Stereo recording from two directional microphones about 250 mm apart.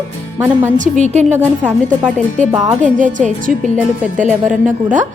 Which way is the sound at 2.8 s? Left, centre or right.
Right.